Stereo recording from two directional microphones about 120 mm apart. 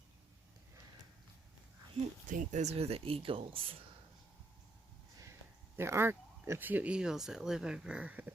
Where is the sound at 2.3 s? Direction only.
90° right; by 3.8 s 50° right (ahead or behind).